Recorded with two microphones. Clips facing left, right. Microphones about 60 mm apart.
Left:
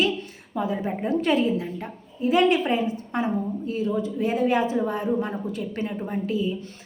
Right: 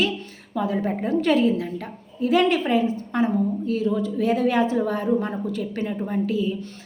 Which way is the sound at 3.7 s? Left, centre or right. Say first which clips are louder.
Right 1 dB; left.